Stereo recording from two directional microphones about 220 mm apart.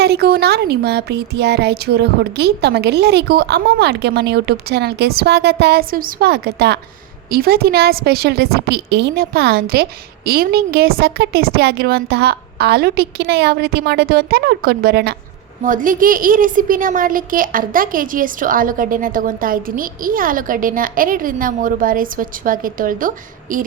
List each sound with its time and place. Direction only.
0.0 s a woman's voice: 45° right (ahead or behind)